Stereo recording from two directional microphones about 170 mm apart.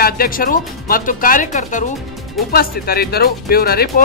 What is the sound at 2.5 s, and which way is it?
Speech, 60° left (ahead or behind).